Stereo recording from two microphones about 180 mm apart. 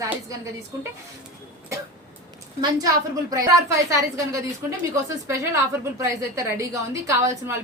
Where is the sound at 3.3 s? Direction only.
20° right (ahead or behind).